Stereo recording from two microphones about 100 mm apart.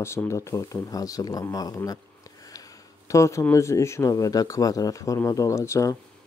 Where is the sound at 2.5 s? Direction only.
35° left (ahead or behind).